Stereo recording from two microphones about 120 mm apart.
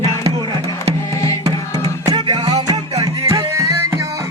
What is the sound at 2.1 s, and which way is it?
Music, 40° right (ahead or behind).